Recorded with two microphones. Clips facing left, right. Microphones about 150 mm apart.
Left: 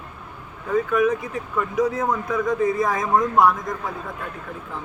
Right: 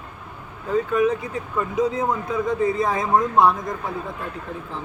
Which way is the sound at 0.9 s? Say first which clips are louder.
Even; 25° right (ahead or behind).